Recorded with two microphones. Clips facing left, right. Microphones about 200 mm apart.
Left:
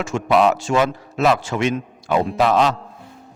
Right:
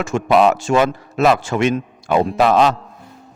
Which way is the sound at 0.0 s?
55° right (ahead or behind).